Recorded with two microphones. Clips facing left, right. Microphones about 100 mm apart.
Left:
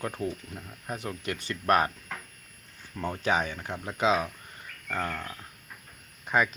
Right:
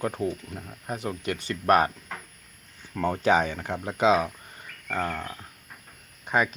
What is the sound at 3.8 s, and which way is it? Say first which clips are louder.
Speech: right 4 dB; 25° right (ahead or behind).